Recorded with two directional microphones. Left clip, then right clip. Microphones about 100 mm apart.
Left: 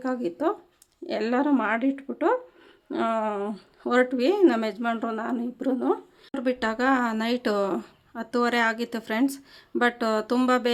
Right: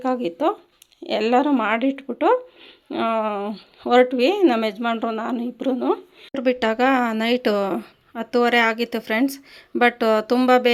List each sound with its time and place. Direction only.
0.0 s speech: 20° right (ahead or behind)
6.3 s speech: 30° right (ahead or behind)